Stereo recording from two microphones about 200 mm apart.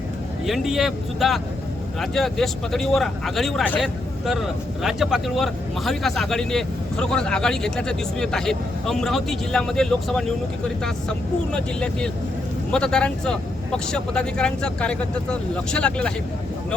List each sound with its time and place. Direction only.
0.4 s speech: centre (ahead or behind)
11.5 s speech: 5° left (ahead or behind)